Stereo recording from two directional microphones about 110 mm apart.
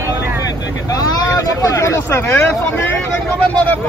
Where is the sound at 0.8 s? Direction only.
35° left (ahead or behind).